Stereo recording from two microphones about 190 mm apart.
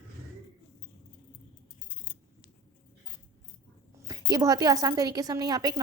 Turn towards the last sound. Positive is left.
turn(degrees=-20)  # may be behind; listen again after turning